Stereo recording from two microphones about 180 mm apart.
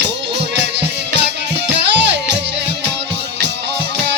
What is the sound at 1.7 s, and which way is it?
Music, 75° right (ahead or behind).